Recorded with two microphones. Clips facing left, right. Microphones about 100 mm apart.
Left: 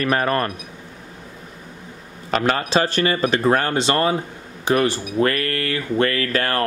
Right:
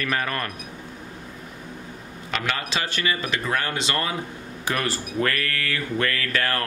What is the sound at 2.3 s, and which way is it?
Speech, 40° left (ahead or behind).